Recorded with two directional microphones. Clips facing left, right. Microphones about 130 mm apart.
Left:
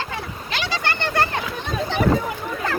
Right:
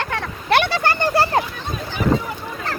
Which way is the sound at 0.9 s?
35° right (ahead or behind).